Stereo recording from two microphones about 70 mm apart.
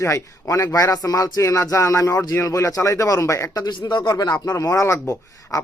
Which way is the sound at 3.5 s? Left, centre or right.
Left.